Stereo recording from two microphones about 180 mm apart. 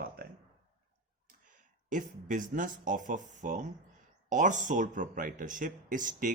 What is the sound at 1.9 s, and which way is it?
Speech, 45° right (ahead or behind).